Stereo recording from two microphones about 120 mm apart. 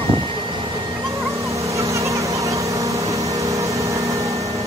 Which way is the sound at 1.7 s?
25° right (ahead or behind).